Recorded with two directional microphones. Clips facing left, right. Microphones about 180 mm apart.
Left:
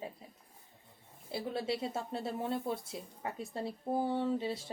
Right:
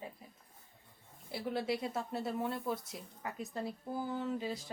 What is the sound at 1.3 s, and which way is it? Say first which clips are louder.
Speech: even; 25° left (ahead or behind).